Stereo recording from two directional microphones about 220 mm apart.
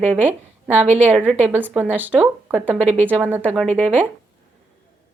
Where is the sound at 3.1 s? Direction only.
10° right (ahead or behind).